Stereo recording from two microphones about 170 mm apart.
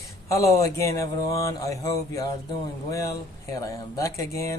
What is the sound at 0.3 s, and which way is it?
Speech, 20° left (ahead or behind).